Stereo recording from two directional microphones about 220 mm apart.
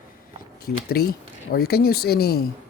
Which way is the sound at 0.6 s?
45° left (ahead or behind).